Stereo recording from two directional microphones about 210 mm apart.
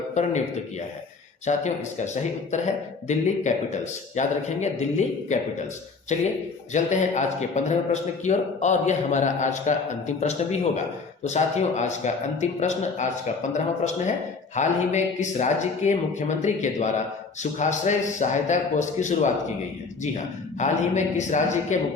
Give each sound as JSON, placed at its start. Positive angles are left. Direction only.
{"t": 0.1, "sound": "speech", "side_deg": 35}
{"t": 3.1, "sound": "speech", "side_deg": 35}
{"t": 20.6, "sound": "speech", "side_deg": 35}